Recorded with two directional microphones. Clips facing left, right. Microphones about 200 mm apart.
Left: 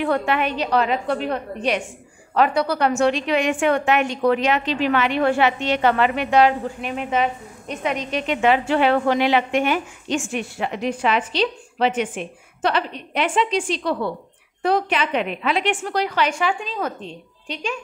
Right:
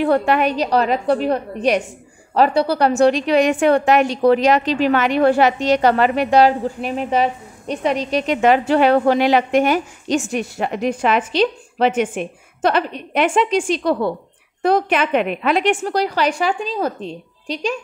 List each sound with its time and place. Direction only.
0.0 s a woman's voice: 35° right (ahead or behind)